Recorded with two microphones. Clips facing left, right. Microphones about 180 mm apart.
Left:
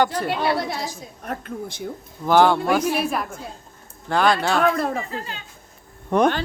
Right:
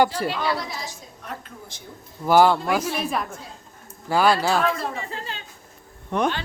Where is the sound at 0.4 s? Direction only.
60° left (ahead or behind).